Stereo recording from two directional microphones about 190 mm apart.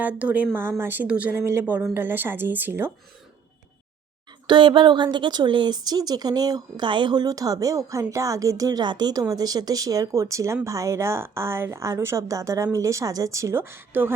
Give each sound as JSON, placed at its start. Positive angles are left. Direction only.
{"t": 0.0, "sound": "speech", "side_deg": -5}
{"t": 4.4, "sound": "speech", "side_deg": -25}